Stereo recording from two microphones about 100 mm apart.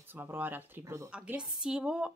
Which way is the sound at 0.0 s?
20° right (ahead or behind).